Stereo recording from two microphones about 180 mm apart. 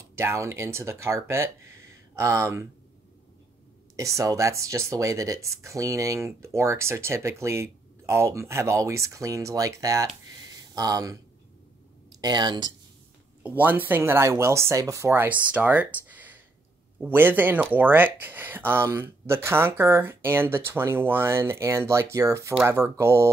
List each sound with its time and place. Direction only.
0.1 s speech: 15° right (ahead or behind)
3.9 s speech: 15° right (ahead or behind)
12.2 s speech: 25° right (ahead or behind)
13.4 s speech: 10° right (ahead or behind)